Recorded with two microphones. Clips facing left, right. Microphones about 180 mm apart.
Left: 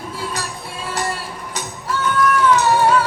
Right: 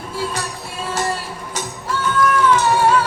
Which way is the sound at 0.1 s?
25° right (ahead or behind).